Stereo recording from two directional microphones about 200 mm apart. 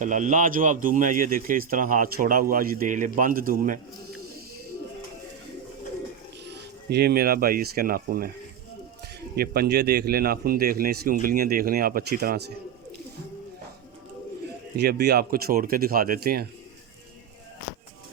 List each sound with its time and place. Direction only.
0.0 s speech: 40° right (ahead or behind)
6.4 s speech: 55° right (ahead or behind)
9.3 s speech: 50° right (ahead or behind)
14.8 s speech: 55° right (ahead or behind)